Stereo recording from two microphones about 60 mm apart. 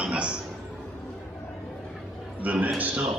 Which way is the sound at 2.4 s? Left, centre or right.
Right.